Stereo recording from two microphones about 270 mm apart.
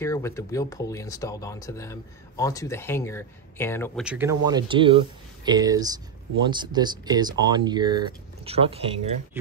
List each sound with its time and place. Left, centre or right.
0.0 s speech: centre
4.0 s speech: centre